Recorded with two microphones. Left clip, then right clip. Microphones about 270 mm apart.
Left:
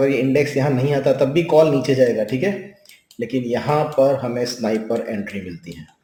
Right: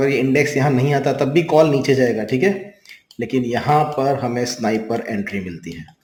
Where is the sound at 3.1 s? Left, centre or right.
Right.